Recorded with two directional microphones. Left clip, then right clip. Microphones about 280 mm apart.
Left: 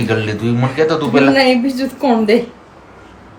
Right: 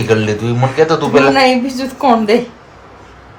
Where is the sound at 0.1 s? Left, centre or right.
Centre.